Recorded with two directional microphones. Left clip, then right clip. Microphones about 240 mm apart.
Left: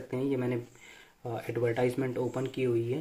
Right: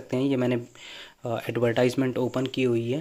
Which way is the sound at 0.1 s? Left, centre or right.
Right.